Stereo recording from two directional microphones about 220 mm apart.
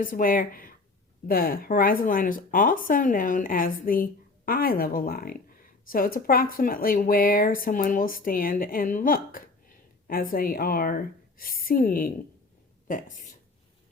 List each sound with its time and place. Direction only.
0.0 s speech: 40° left (ahead or behind)